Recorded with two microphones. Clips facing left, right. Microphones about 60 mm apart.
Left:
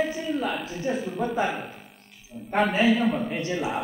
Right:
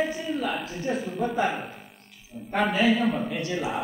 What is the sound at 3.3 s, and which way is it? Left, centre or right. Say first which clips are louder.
Speech: left 1 dB; left.